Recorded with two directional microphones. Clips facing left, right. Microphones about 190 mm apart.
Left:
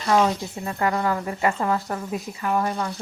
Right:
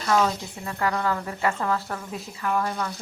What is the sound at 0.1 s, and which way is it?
Speech, 25° left (ahead or behind).